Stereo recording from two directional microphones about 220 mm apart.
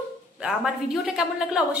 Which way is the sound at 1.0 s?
5° right (ahead or behind).